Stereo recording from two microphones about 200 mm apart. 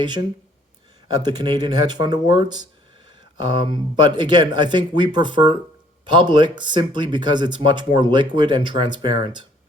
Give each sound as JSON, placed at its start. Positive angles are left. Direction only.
{"t": 1.0, "sound": "speech", "side_deg": -20}